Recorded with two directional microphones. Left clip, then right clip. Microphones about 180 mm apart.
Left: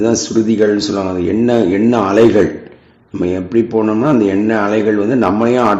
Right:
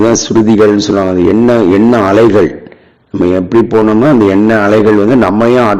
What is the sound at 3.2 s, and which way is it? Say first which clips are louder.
Speech: right 6 dB; 35° right (ahead or behind).